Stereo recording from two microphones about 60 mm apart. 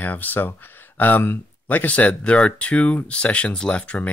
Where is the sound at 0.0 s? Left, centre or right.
Left.